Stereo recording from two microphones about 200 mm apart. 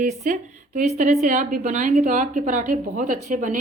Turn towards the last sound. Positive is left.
turn(degrees=-40)  # may be behind; listen again after turning